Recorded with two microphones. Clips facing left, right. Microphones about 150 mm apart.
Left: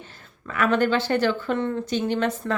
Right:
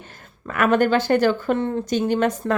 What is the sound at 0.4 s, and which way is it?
A woman's voice, 50° right (ahead or behind).